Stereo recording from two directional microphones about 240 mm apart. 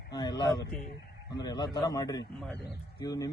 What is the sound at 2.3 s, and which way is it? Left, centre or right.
Speech, centre.